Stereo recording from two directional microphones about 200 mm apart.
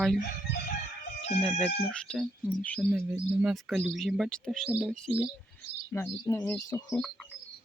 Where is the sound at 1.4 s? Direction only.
Centre (ahead or behind).